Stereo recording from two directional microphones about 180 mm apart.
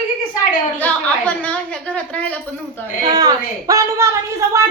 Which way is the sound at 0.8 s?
10° left (ahead or behind).